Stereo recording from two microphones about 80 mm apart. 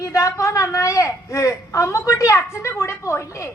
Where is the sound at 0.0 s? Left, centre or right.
Left.